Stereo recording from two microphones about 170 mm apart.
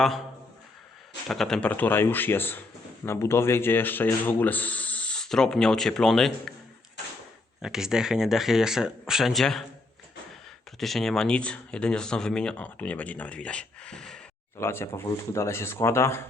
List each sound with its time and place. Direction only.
1.3 s speech: centre (ahead or behind)
7.6 s speech: 5° right (ahead or behind)
10.8 s speech: centre (ahead or behind)
14.6 s speech: 15° left (ahead or behind)